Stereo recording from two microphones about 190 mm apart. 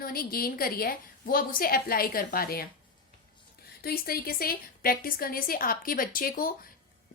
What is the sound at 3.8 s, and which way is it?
A woman's voice, 50° left (ahead or behind).